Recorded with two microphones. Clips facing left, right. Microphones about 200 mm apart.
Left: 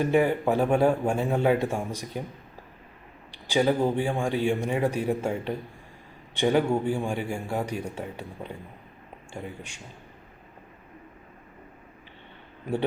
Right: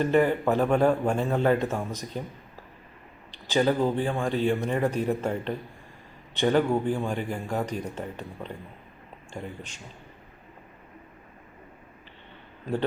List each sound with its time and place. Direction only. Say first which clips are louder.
0.0 s a man's voice: even; 10° left (ahead or behind)
3.3 s a man's voice: even; 10° left (ahead or behind)